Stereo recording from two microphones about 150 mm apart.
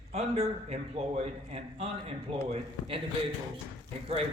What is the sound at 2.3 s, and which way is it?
Speech, 40° right (ahead or behind).